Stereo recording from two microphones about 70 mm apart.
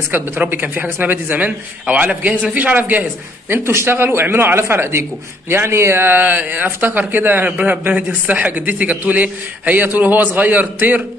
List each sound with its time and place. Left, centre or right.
0.1 s speech: right